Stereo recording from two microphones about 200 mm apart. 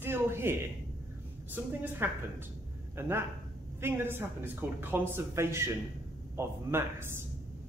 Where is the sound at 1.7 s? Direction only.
10° right (ahead or behind).